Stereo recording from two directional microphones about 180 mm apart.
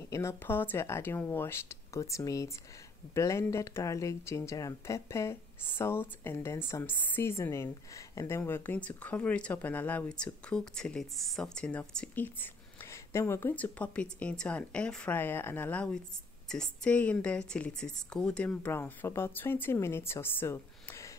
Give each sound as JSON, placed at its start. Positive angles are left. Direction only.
{"t": 0.1, "sound": "speech", "side_deg": 15}